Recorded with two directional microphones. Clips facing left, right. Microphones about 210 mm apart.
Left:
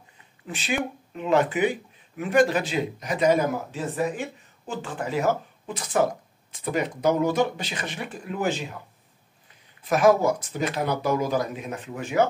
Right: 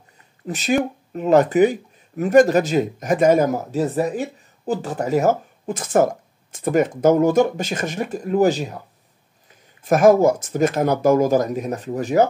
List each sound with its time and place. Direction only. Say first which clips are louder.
0.5 s speech: right 8 dB; 40° right (ahead or behind)
9.8 s speech: right 6 dB; 45° right (ahead or behind)